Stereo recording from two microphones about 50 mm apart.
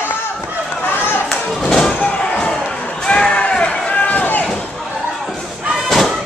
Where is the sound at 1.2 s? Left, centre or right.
Centre.